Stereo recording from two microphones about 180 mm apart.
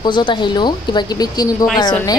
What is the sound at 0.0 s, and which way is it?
A woman's voice, 25° left (ahead or behind).